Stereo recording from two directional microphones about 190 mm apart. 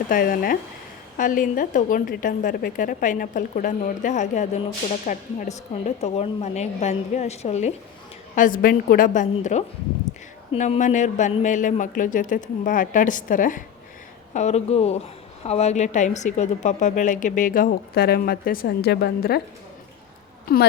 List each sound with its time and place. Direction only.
0.1 s a woman's voice: 45° left (ahead or behind)
8.4 s a woman's voice: 45° left (ahead or behind)
10.1 s a sound: 15° left (ahead or behind)
10.5 s a woman's voice: 35° left (ahead or behind); by 19.4 s 55° left (ahead or behind)